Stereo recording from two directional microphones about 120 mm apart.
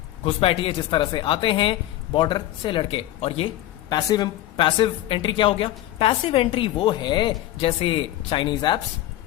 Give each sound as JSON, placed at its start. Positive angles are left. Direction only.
{"t": 0.3, "sound": "a woman's voice", "side_deg": 50}
{"t": 3.2, "sound": "speech", "side_deg": 55}
{"t": 3.8, "sound": "a woman's voice", "side_deg": 35}